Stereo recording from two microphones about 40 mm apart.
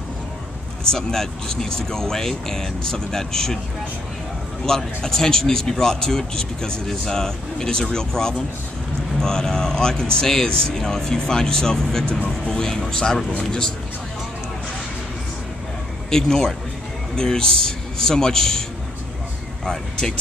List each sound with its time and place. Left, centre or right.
0.8 s speech: centre
4.6 s speech: centre
16.1 s speech: centre
19.6 s speech: centre